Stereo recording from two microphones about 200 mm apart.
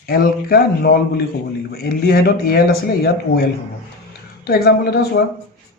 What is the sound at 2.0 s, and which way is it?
Speech, 50° left (ahead or behind).